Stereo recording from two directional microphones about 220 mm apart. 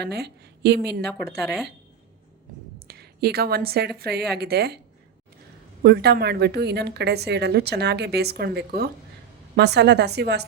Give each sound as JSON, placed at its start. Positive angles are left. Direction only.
{"t": 0.0, "sound": "a woman's voice", "side_deg": -50}
{"t": 1.4, "sound": "speech", "side_deg": 0}
{"t": 2.7, "sound": "a woman's voice", "side_deg": -45}
{"t": 5.8, "sound": "a woman's voice", "side_deg": -45}